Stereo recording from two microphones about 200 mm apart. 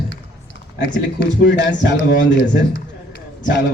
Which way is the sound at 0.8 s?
65° left (ahead or behind).